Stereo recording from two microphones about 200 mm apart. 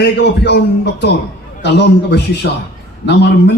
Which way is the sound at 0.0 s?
55° left (ahead or behind).